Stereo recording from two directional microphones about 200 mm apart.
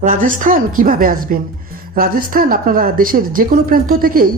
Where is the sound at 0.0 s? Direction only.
40° right (ahead or behind).